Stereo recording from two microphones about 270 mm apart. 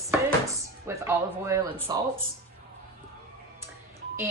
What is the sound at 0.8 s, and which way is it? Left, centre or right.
Speech, centre.